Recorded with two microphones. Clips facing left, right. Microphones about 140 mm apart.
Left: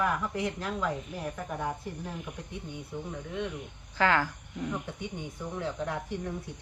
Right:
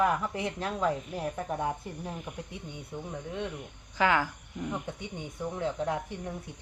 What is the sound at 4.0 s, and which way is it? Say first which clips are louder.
Speech: even; 15° right (ahead or behind).